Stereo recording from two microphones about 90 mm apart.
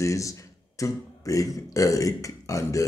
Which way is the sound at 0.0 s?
35° left (ahead or behind).